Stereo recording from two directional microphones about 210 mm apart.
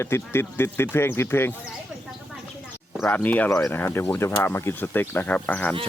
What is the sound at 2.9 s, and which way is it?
Speech, 5° left (ahead or behind).